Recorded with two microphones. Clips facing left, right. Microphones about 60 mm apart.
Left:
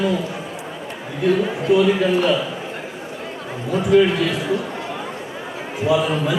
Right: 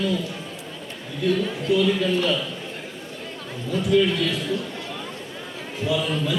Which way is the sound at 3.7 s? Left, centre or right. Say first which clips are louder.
Left 5 dB; left.